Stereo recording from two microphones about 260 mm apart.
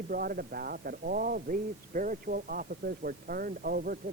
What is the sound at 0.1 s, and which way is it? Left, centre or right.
A man's voice, right.